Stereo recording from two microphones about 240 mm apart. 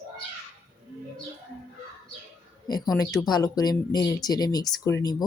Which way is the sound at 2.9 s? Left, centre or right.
Centre.